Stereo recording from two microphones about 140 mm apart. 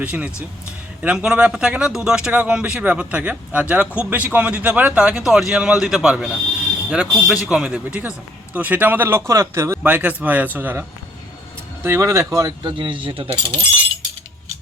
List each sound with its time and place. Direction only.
0.0 s speech: 10° right (ahead or behind); by 13.6 s 35° right (ahead or behind)